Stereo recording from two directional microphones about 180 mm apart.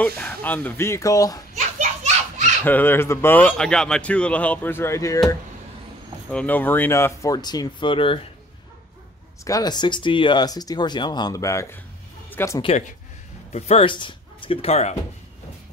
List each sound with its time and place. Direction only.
0.0 s a man's voice: 5° left (ahead or behind)
1.8 s children playing: 40° right (ahead or behind)
2.6 s a man's voice: 10° left (ahead or behind)
6.3 s a man's voice: 10° left (ahead or behind); by 8.2 s 30° left (ahead or behind)
9.4 s speech: 20° left (ahead or behind)
13.5 s speech: 35° left (ahead or behind)